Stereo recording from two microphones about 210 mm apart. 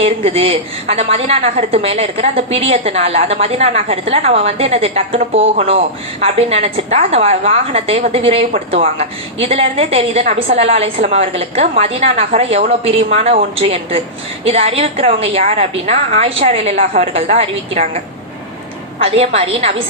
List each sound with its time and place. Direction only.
0.0 s a woman's voice: 30° right (ahead or behind)
16.7 s a woman's voice: 40° right (ahead or behind)
17.2 s a woman's voice: 30° right (ahead or behind)
19.0 s a woman's voice: 30° right (ahead or behind)